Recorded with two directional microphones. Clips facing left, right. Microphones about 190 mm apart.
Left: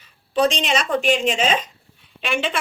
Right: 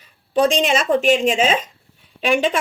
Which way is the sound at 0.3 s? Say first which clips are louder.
Right 3 dB; 50° right (ahead or behind).